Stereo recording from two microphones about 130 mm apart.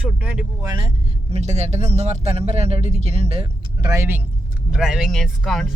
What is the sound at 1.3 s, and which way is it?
Speech, 60° right (ahead or behind).